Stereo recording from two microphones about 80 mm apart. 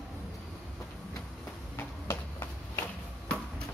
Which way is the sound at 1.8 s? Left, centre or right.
Left.